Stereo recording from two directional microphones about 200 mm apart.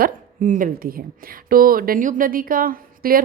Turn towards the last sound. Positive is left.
turn(degrees=-45)  # may be behind; listen again after turning